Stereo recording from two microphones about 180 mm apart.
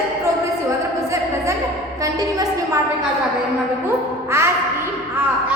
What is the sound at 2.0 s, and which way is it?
Speech, 20° right (ahead or behind).